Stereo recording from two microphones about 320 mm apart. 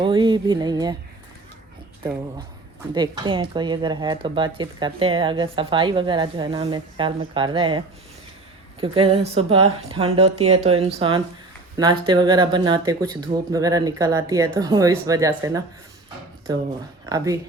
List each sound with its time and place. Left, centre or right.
0.0 s speech: centre
2.9 s speech: centre
8.8 s speech: centre